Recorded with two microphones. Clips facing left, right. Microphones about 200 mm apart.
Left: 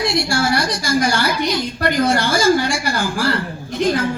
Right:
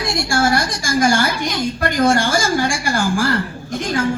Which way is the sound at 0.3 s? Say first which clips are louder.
Right 1 dB; 45° right (ahead or behind).